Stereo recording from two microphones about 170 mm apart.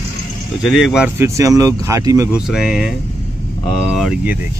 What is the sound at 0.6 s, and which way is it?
Speech, centre (ahead or behind).